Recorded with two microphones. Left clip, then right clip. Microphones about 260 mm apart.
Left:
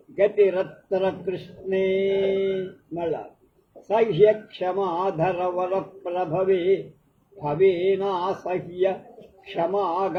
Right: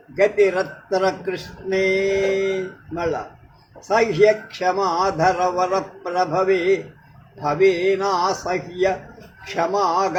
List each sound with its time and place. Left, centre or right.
0.2 s a man's voice: right